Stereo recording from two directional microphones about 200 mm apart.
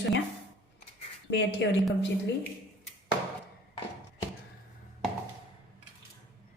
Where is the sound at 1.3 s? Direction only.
60° left (ahead or behind).